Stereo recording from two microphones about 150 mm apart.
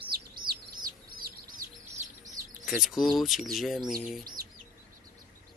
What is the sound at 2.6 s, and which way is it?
Speech, centre (ahead or behind).